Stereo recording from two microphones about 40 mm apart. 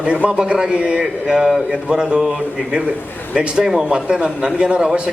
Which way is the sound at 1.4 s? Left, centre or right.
Centre.